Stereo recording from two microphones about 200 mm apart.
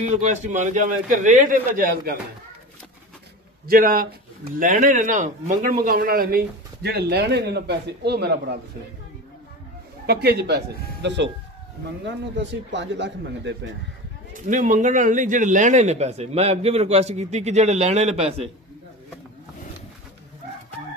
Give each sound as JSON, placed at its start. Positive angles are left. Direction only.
{"t": 0.0, "sound": "a man's voice", "side_deg": -40}
{"t": 3.6, "sound": "a man's voice", "side_deg": -45}
{"t": 10.0, "sound": "speech", "side_deg": -55}
{"t": 14.3, "sound": "a man's voice", "side_deg": -40}